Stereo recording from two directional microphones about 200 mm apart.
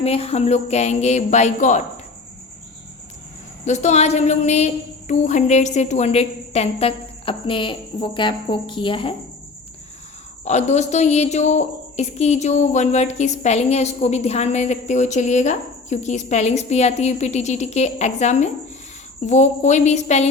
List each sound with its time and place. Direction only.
0.0 s a woman's voice: 30° left (ahead or behind)
3.6 s a woman's voice: 35° left (ahead or behind)
10.4 s a woman's voice: 35° left (ahead or behind)